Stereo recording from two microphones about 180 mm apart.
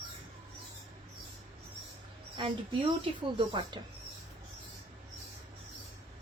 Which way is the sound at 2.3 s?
30° right (ahead or behind).